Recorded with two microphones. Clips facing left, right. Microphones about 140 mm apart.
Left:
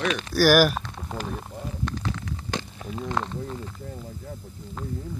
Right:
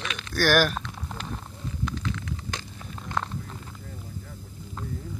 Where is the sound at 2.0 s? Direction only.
30° left (ahead or behind).